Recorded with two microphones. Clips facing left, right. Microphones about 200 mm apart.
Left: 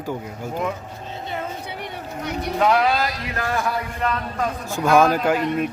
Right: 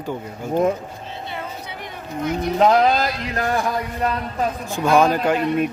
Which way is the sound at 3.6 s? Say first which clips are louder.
Right 2 dB; 15° right (ahead or behind).